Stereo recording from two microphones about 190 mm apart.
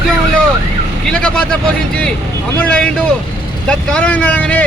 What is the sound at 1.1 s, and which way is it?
Speech, 5° left (ahead or behind).